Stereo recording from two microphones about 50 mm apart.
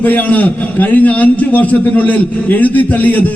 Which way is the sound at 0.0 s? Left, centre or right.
Left.